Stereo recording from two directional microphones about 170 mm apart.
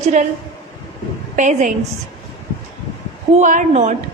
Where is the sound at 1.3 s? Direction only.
45° right (ahead or behind).